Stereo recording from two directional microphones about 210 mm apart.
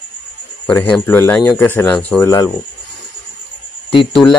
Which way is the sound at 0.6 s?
5° left (ahead or behind).